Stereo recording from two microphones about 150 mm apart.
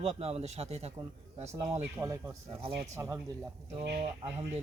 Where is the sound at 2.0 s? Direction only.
20° right (ahead or behind).